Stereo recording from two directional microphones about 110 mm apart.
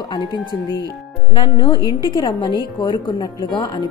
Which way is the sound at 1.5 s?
45° left (ahead or behind).